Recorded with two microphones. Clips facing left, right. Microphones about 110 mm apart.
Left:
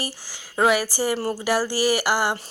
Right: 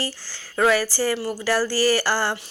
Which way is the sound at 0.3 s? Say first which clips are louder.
Even; 15° left (ahead or behind).